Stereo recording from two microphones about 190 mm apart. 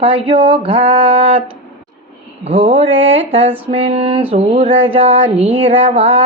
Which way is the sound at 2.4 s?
30° right (ahead or behind).